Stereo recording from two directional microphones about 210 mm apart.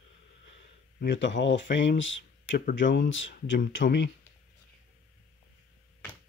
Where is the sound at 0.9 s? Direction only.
60° left (ahead or behind).